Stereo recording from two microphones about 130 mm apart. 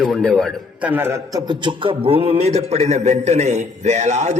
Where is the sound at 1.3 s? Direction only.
35° right (ahead or behind).